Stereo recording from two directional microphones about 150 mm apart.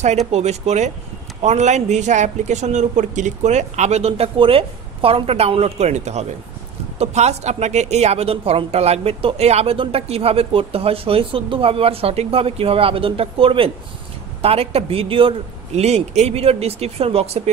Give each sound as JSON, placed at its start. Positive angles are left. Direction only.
{"t": 0.3, "sound": "speech", "side_deg": -45}